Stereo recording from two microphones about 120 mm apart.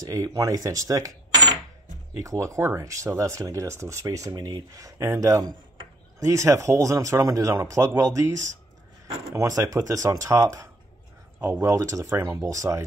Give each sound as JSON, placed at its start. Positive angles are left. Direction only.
{"t": 0.0, "sound": "speech", "side_deg": -30}
{"t": 11.3, "sound": "speech", "side_deg": -10}
{"t": 11.6, "sound": "speech", "side_deg": -25}